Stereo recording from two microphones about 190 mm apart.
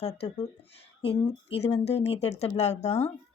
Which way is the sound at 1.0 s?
30° left (ahead or behind).